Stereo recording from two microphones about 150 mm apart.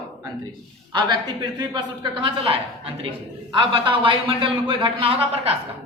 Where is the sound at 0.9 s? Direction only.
30° right (ahead or behind).